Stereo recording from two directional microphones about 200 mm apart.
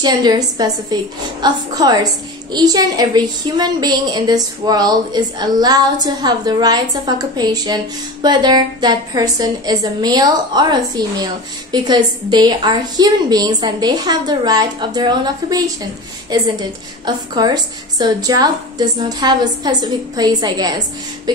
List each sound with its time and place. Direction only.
0.0 s a woman's voice: 20° right (ahead or behind)